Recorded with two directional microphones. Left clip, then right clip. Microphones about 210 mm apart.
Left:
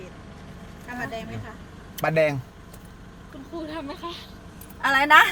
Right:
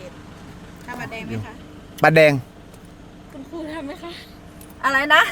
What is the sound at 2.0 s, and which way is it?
Speech, 55° right (ahead or behind).